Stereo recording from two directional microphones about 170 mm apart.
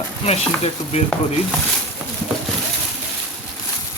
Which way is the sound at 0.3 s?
40° left (ahead or behind).